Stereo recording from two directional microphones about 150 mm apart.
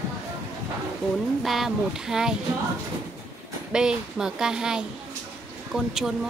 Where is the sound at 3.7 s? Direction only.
5° right (ahead or behind).